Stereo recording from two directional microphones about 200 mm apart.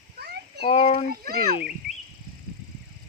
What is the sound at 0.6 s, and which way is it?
Speech, 30° left (ahead or behind).